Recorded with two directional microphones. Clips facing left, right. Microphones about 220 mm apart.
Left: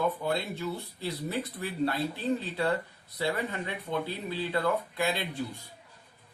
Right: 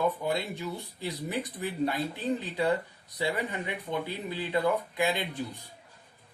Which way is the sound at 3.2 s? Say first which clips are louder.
Even; 15° right (ahead or behind).